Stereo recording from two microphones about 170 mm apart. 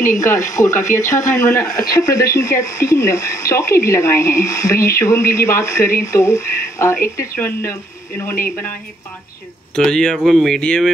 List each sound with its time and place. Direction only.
0.0 s speech: 50° left (ahead or behind)
1.3 s speech: 15° left (ahead or behind)
9.8 s speech: 5° left (ahead or behind)